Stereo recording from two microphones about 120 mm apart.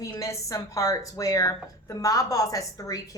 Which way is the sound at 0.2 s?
25° left (ahead or behind).